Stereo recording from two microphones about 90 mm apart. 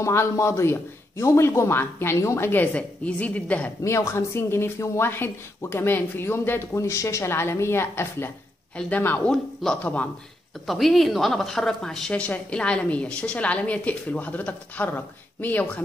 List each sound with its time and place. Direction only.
0.0 s speech: 30° left (ahead or behind); by 3.7 s 15° left (ahead or behind)
3.8 s speech: 30° left (ahead or behind)
8.7 s a woman's voice: 10° left (ahead or behind)
9.0 s speech: 25° left (ahead or behind)
9.3 s a woman's voice: 5° left (ahead or behind)